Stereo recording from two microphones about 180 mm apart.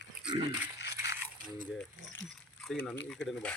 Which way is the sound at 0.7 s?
70° left (ahead or behind).